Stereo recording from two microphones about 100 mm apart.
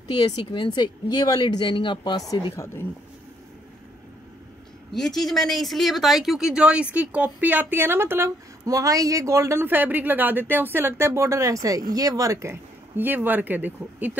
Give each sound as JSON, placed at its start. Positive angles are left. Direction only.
{"t": 0.1, "sound": "speech", "side_deg": 50}
{"t": 2.5, "sound": "speech", "side_deg": 25}
{"t": 4.9, "sound": "speech", "side_deg": 5}